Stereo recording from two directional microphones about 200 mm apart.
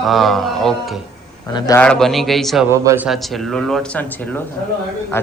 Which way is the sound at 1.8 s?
5° left (ahead or behind).